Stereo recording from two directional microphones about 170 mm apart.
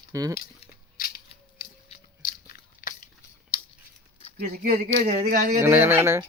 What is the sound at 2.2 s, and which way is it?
Biting, 55° left (ahead or behind).